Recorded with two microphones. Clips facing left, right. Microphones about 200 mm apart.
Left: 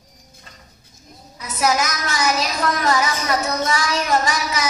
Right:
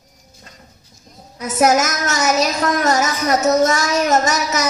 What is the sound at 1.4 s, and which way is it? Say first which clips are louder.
A woman's voice: right 5 dB; 50° right (ahead or behind).